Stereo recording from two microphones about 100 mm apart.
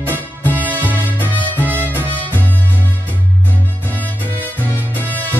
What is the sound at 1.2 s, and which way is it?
Music, 15° left (ahead or behind).